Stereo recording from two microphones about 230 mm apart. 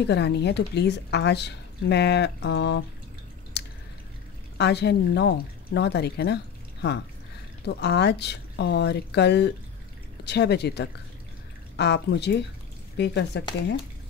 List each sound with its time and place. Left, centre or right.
0.0 s speech: left
3.6 s drip: left
4.6 s speech: left